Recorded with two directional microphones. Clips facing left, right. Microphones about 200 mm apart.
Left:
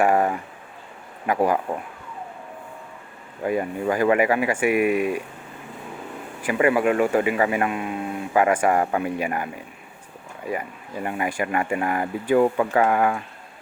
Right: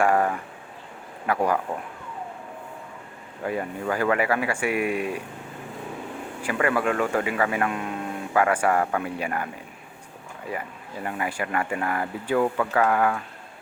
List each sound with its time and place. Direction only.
0.0 s a sound: 15° left (ahead or behind)
1.3 s speech: 10° left (ahead or behind)
3.4 s speech: 15° left (ahead or behind)
6.4 s speech: 15° left (ahead or behind)
7.7 s speech: 5° left (ahead or behind)
10.5 s speech: 15° left (ahead or behind)